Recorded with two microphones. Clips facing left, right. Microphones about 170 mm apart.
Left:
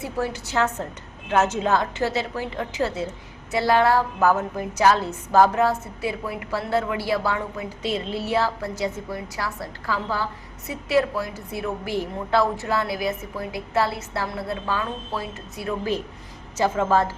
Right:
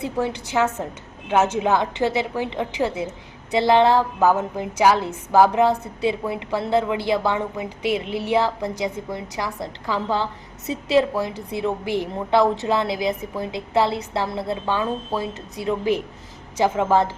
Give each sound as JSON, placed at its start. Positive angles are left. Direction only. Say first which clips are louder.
{"t": 0.0, "sound": "a woman's voice", "louder": "right 3 dB", "side_deg": -15}